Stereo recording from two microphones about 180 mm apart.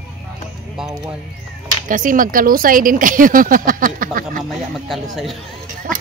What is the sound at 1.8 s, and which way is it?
Speech, 45° right (ahead or behind).